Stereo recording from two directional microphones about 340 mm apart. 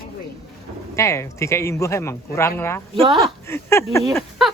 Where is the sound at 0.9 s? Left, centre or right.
Centre.